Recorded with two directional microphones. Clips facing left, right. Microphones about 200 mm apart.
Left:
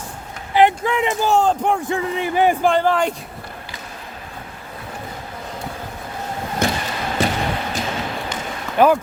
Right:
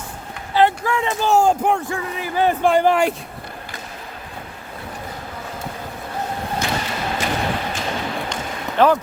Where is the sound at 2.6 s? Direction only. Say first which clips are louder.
Right 1 dB; 10° right (ahead or behind).